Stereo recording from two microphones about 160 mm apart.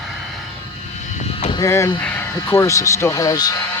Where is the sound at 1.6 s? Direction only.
20° left (ahead or behind).